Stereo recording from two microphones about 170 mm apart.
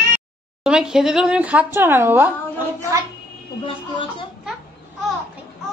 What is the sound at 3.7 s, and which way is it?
Speech, 30° left (ahead or behind).